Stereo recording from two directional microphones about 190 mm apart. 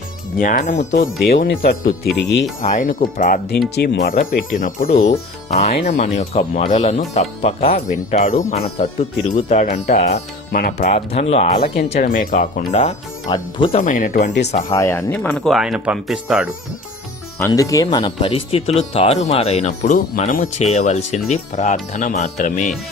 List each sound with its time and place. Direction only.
0.3 s speech: 45° left (ahead or behind)
0.9 s speech: 60° left (ahead or behind)
1.4 s speech: 50° left (ahead or behind); by 2.5 s 70° left (ahead or behind)
2.6 s speech: 40° left (ahead or behind)
3.8 s speech: 60° left (ahead or behind)
10.9 s speech: 35° left (ahead or behind)
12.0 s speech: 50° left (ahead or behind)
13.2 s speech: 20° left (ahead or behind)
13.7 s speech: 45° left (ahead or behind)
14.7 s speech: 15° left (ahead or behind); by 16.5 s 5° right (ahead or behind)
17.3 s speech: 15° left (ahead or behind); by 22.7 s 40° left (ahead or behind)